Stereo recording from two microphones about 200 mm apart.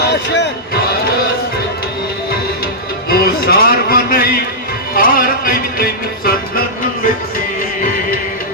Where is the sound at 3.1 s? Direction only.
50° left (ahead or behind).